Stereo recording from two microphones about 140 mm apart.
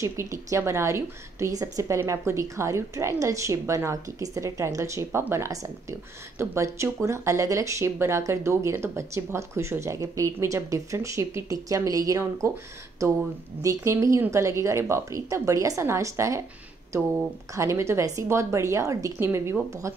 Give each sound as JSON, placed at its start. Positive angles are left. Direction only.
{"t": 0.0, "sound": "a woman's voice", "side_deg": -20}